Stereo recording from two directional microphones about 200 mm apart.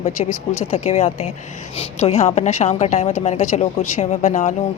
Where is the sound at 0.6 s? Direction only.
30° left (ahead or behind).